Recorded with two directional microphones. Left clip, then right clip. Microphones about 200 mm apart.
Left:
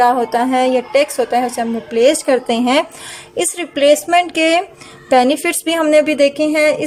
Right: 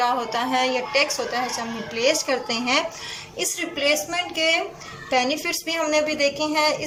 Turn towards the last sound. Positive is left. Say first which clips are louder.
# left 8 dB
turn(degrees=45)  # may be behind; listen again after turning